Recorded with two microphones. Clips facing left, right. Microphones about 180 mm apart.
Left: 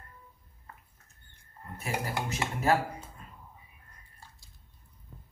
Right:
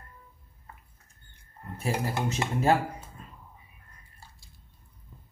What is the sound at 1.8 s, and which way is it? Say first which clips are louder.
Speech: right 4 dB; 25° right (ahead or behind).